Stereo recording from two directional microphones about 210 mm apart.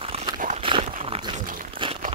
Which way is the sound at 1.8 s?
25° right (ahead or behind).